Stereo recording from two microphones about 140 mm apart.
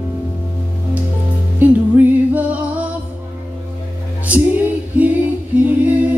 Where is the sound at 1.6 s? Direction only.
15° right (ahead or behind).